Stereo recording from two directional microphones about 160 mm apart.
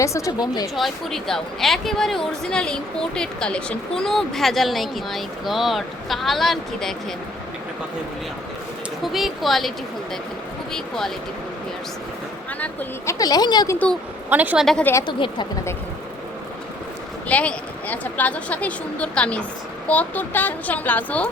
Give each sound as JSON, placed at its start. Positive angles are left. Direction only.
{"t": 0.0, "sound": "a woman's voice", "side_deg": 20}
{"t": 0.8, "sound": "speech", "side_deg": 0}
{"t": 9.1, "sound": "speech", "side_deg": 0}
{"t": 12.5, "sound": "speech", "side_deg": 10}
{"t": 13.1, "sound": "a woman's voice", "side_deg": 25}
{"t": 14.3, "sound": "a woman's voice", "side_deg": -10}
{"t": 15.0, "sound": "a woman's voice", "side_deg": 30}
{"t": 17.2, "sound": "a woman's voice", "side_deg": 10}